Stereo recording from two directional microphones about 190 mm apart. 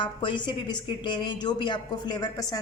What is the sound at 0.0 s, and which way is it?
A woman's voice, 25° left (ahead or behind).